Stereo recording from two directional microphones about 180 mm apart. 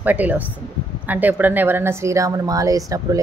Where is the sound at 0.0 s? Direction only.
10° right (ahead or behind).